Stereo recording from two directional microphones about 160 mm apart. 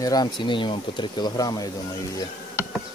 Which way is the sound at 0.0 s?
25° left (ahead or behind).